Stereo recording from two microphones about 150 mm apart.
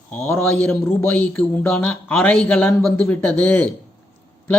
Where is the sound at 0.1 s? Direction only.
15° left (ahead or behind).